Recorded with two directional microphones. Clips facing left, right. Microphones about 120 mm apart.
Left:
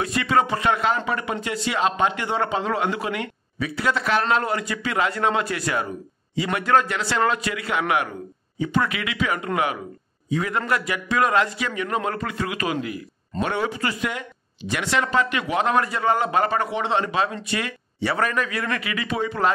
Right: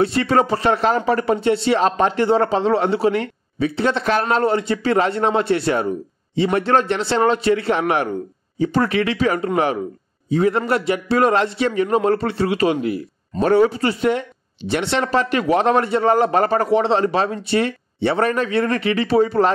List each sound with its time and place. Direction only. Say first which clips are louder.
0.0 s speech: right 5 dB; 35° right (ahead or behind)